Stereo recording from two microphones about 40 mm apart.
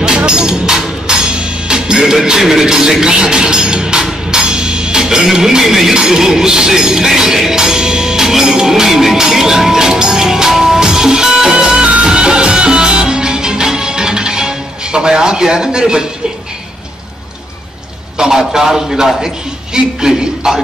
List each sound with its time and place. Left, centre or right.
0.0 s music: right
2.2 s speech: centre
5.9 s music: centre
18.1 s a man's voice: centre